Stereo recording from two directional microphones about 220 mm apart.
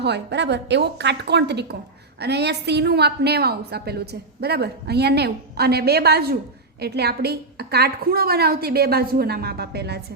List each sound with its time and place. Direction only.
0.0 s a woman's voice: 50° right (ahead or behind)